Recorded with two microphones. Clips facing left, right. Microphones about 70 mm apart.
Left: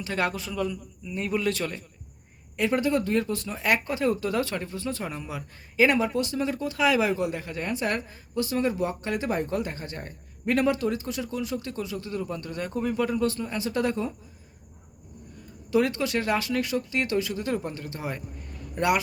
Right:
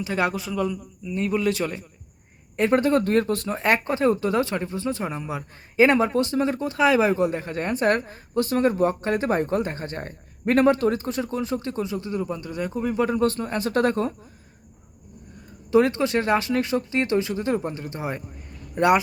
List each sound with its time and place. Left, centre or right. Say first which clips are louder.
0.0 s a man's voice: right 4 dB; centre
2.6 s speech: right 5 dB; right; by 12.9 s centre
13.1 s speech: right 4 dB; right
15.7 s speech: right 5 dB; right